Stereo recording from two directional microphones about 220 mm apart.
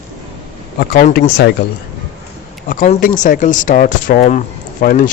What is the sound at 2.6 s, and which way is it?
Speech, 35° left (ahead or behind).